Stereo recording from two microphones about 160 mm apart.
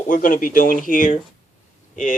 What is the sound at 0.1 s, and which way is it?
Speech, 60° left (ahead or behind).